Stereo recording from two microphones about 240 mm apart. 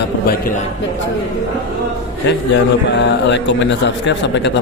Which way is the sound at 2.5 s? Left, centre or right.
Left.